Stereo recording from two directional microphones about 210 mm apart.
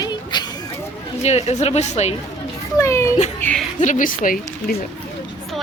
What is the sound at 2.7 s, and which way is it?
Speech, 15° left (ahead or behind).